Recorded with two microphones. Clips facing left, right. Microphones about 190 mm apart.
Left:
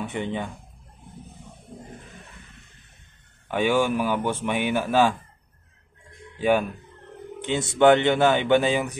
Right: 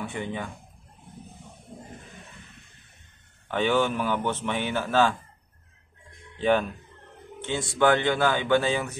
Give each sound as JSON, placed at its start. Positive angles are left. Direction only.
{"t": 0.0, "sound": "a man's voice", "side_deg": 20}
{"t": 3.4, "sound": "a man's voice", "side_deg": 10}
{"t": 6.3, "sound": "speech", "side_deg": 10}
{"t": 7.4, "sound": "speech", "side_deg": 20}